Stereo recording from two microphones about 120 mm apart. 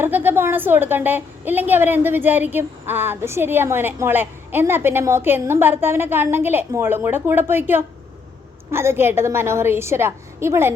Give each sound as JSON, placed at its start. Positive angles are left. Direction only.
{"t": 0.0, "sound": "a woman's voice", "side_deg": -15}